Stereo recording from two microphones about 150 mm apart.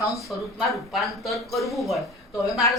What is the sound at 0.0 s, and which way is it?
Speech, 20° left (ahead or behind).